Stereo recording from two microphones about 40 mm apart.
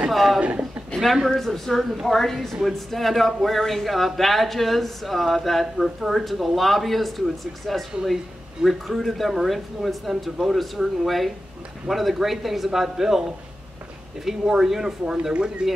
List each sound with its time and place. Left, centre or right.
0.1 s speech: centre
0.4 s speech: right
1.2 s speech: centre
14.2 s speech: centre
15.3 s speech: right